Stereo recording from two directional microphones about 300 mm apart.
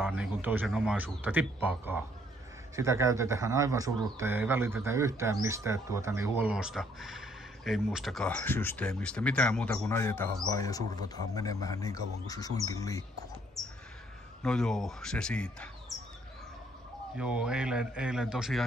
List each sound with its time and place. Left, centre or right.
0.0 s a man's voice: centre
13.6 s speech: centre
17.2 s speech: centre